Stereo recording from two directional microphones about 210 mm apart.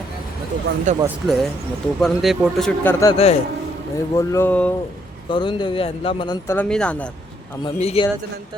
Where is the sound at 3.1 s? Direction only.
30° left (ahead or behind).